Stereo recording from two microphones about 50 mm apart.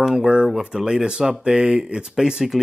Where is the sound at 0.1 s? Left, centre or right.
Centre.